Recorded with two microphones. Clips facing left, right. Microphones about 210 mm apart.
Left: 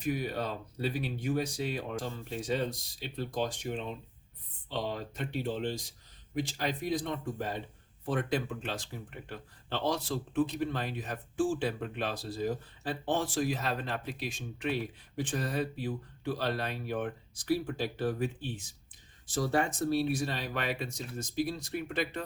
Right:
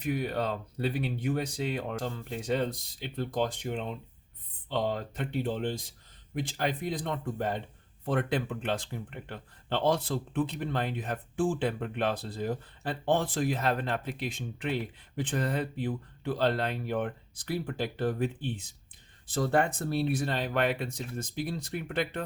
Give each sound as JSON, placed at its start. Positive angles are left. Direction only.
{"t": 0.1, "sound": "speech", "side_deg": -55}